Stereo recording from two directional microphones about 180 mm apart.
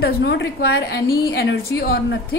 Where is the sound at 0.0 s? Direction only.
70° left (ahead or behind).